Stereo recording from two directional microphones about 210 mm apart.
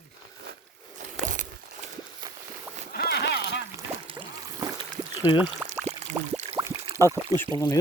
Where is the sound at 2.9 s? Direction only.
50° left (ahead or behind).